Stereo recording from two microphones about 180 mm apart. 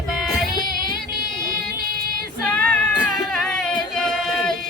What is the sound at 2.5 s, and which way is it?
Music, 5° left (ahead or behind).